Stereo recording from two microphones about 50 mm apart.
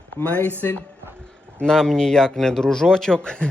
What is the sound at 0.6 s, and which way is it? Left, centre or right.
Speech, left.